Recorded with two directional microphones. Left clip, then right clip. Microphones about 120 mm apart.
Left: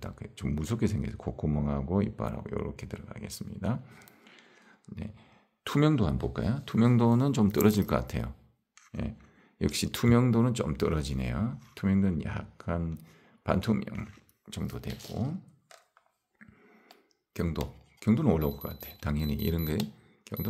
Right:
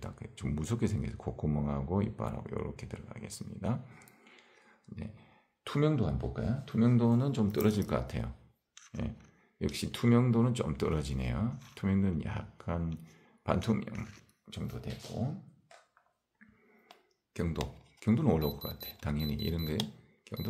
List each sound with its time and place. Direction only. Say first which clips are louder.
0.0 s speech: left 3 dB; 30° left (ahead or behind)
5.6 s speech: left 4 dB; 70° left (ahead or behind); by 8.3 s 50° left (ahead or behind)
9.6 s speech: left 5 dB; 65° left (ahead or behind); by 14.0 s 40° left (ahead or behind)
14.5 s speech: left 4 dB; 75° left (ahead or behind)
17.3 s speech: left 2 dB; 40° left (ahead or behind); by 19.8 s 55° left (ahead or behind)
20.3 s cash register: left 3 dB; 55° left (ahead or behind)